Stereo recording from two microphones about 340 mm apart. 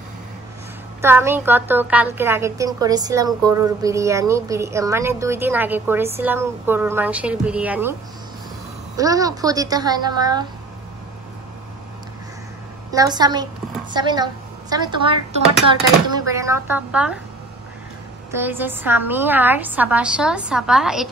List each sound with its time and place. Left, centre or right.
1.0 s a woman's voice: centre
8.9 s a woman's voice: centre
12.9 s a woman's voice: centre
16.3 s a woman's voice: centre
18.3 s a woman's voice: centre